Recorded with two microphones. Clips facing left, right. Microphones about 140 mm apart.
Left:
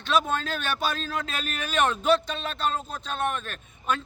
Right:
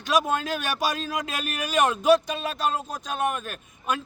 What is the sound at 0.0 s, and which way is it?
A man's voice, 10° right (ahead or behind).